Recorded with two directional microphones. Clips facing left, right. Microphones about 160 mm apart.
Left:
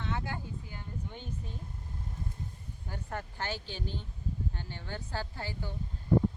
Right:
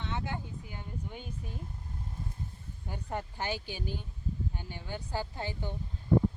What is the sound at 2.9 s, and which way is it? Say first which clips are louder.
Speech: right 2 dB; 15° right (ahead or behind).